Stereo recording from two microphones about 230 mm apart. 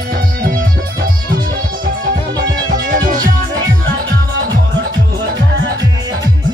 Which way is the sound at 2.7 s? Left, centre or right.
Right.